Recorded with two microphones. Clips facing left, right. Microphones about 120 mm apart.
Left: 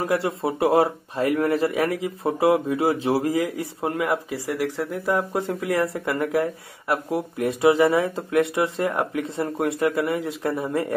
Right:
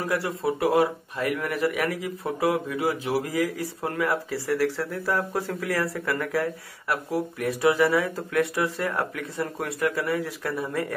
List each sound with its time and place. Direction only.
0.0 s speech: 25° left (ahead or behind)